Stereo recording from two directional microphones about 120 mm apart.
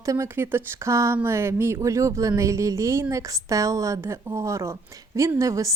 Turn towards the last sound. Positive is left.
turn(degrees=-25)  # may be behind; listen again after turning